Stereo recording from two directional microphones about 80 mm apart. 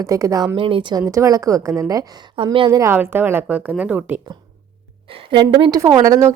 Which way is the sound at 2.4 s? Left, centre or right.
Right.